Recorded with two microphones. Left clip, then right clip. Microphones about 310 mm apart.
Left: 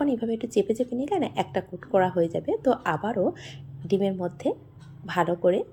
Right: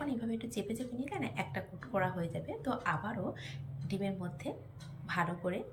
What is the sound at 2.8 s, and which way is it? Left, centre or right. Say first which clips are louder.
Speech: left 11 dB; centre.